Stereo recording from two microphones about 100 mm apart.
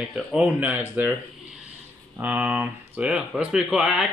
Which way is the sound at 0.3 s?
10° right (ahead or behind).